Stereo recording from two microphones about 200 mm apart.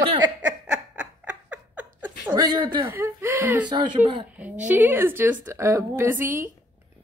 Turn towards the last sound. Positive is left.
turn(degrees=-10)  # may be behind; listen again after turning